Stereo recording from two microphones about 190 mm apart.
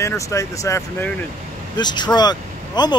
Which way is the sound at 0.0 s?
15° left (ahead or behind).